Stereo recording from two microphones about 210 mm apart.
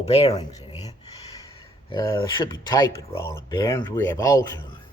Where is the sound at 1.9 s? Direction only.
20° left (ahead or behind).